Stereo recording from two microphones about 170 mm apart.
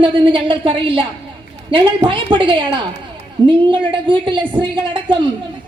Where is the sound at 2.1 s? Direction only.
30° right (ahead or behind).